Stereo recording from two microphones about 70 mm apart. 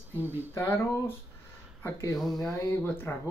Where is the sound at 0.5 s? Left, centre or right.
Left.